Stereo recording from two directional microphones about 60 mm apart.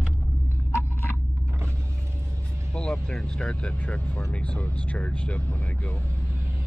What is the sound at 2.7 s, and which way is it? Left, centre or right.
Speech, centre.